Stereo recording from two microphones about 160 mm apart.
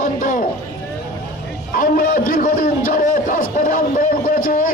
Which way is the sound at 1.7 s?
65° left (ahead or behind).